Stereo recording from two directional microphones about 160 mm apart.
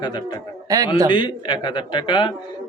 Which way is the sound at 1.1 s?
30° left (ahead or behind).